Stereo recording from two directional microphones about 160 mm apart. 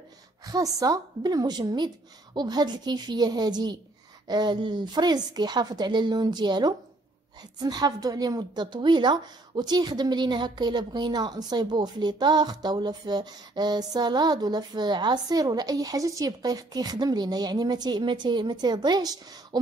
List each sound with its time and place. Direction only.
0.5 s a woman's voice: 20° right (ahead or behind)